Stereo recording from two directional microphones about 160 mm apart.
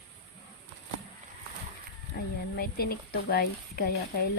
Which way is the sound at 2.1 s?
70° left (ahead or behind).